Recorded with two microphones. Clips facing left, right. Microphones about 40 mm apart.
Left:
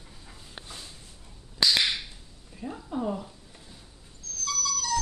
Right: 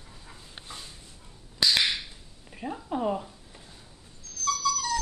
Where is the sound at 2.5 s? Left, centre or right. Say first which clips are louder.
Right 2 dB; right.